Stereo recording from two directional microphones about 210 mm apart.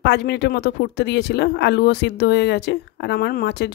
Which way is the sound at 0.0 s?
50° left (ahead or behind).